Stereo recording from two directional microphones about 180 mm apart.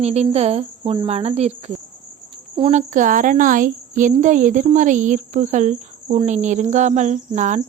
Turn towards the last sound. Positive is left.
turn(degrees=-40)  # may be behind; listen again after turning